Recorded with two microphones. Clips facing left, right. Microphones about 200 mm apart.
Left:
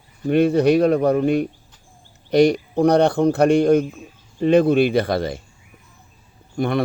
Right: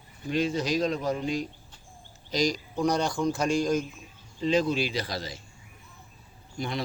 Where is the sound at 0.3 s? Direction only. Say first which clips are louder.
Left 12 dB; 60° left (ahead or behind).